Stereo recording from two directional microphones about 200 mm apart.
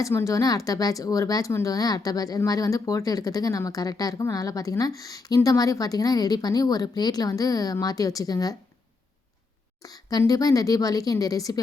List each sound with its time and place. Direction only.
0.0 s speech: 15° left (ahead or behind)
9.8 s speech: 20° left (ahead or behind)